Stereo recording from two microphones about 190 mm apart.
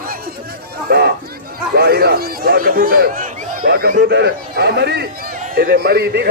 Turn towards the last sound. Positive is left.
turn(degrees=-55)  # may be behind; listen again after turning